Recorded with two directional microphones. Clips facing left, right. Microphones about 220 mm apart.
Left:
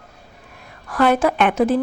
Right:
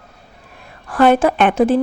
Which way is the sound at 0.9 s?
30° right (ahead or behind).